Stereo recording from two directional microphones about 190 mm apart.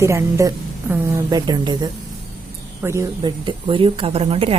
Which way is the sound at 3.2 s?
25° right (ahead or behind).